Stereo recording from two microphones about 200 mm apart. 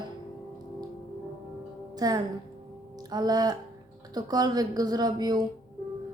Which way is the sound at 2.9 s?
20° right (ahead or behind).